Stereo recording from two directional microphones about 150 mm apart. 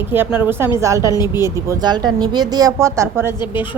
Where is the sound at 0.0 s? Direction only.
15° right (ahead or behind).